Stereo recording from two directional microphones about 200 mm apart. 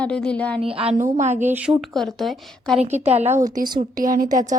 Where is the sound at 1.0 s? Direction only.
35° right (ahead or behind).